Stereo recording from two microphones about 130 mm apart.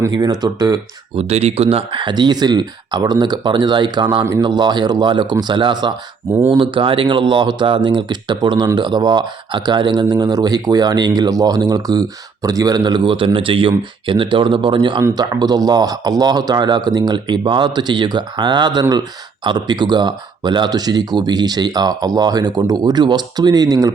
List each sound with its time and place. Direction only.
0.1 s speech: 30° right (ahead or behind)
1.1 s speech: 55° right (ahead or behind); by 23.9 s 25° right (ahead or behind)